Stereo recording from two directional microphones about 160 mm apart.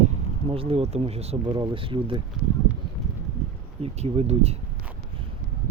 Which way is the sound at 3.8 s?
40° right (ahead or behind).